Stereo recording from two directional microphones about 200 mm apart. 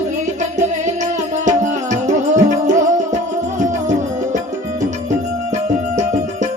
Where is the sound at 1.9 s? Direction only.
35° right (ahead or behind).